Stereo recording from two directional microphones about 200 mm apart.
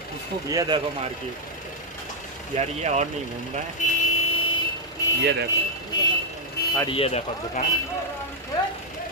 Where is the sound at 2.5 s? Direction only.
35° right (ahead or behind).